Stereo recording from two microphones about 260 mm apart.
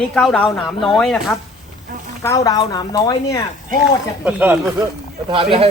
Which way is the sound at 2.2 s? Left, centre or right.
Centre.